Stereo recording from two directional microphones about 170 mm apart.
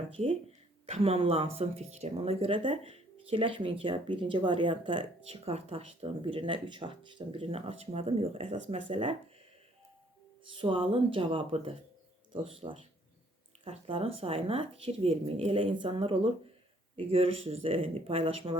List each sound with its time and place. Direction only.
0.1 s speech: 35° right (ahead or behind)
10.5 s speech: 30° right (ahead or behind)